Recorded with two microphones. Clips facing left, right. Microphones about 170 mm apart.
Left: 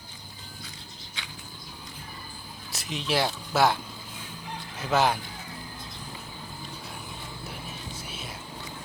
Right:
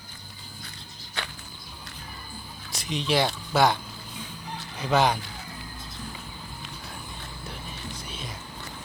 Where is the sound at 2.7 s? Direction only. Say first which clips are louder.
Right 3 dB; 5° left (ahead or behind).